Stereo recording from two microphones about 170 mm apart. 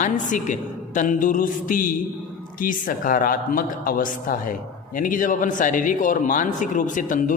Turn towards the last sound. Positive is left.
turn(degrees=50)  # may be behind; listen again after turning